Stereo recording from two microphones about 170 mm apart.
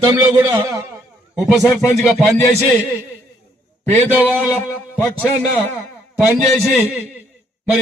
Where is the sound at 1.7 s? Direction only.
15° left (ahead or behind).